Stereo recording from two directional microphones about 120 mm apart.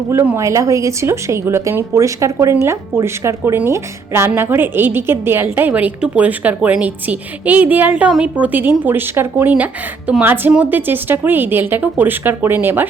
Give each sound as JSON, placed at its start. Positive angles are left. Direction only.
{"t": 0.3, "sound": "a woman's voice", "side_deg": -25}